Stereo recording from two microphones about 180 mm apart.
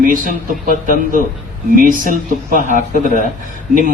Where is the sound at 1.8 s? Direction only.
50° right (ahead or behind).